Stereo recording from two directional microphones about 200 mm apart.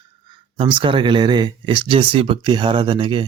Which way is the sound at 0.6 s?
25° right (ahead or behind).